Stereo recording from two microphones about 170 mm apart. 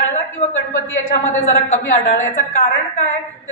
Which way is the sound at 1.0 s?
45° left (ahead or behind).